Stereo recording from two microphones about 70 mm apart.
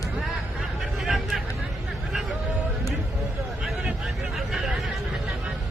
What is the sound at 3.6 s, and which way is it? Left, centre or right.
Vehicle, centre.